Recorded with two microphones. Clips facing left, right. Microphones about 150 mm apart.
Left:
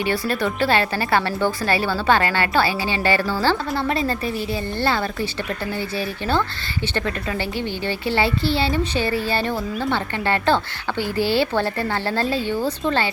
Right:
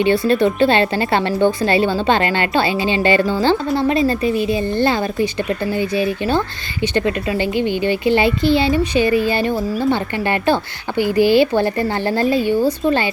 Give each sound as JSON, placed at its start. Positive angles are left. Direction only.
{"t": 0.0, "sound": "a woman's voice", "side_deg": -20}